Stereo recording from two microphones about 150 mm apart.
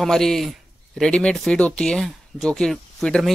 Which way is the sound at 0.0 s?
5° left (ahead or behind).